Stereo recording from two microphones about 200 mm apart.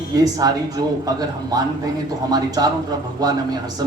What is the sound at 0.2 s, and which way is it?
Speech, 20° right (ahead or behind).